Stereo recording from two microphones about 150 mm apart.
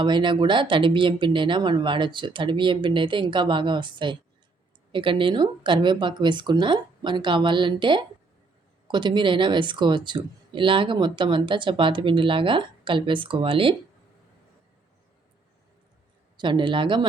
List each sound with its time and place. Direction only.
0.0 s speech: 30° right (ahead or behind)
16.4 s speech: 30° right (ahead or behind)